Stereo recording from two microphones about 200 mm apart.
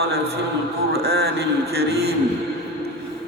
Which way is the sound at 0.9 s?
55° right (ahead or behind).